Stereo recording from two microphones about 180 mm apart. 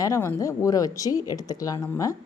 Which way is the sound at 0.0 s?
15° left (ahead or behind).